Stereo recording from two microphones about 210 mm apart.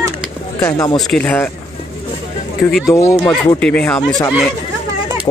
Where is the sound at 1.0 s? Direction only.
5° left (ahead or behind).